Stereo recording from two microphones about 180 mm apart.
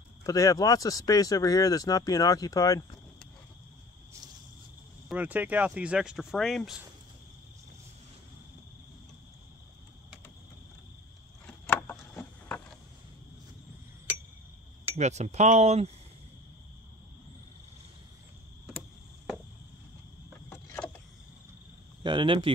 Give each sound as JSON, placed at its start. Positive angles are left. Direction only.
{"t": 0.2, "sound": "speech", "side_deg": 20}
{"t": 5.0, "sound": "speech", "side_deg": -5}
{"t": 11.4, "sound": "a sound", "side_deg": 5}
{"t": 15.0, "sound": "speech", "side_deg": -40}
{"t": 20.4, "sound": "vehicle", "side_deg": 10}
{"t": 22.0, "sound": "speech", "side_deg": -30}